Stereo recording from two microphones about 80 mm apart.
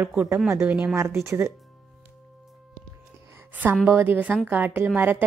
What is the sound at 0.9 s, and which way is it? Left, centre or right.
Speech, right.